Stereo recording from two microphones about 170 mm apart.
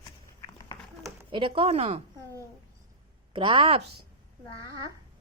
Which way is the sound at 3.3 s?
30° right (ahead or behind).